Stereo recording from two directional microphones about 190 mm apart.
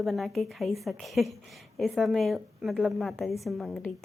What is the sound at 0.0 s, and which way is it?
A woman's voice, centre (ahead or behind).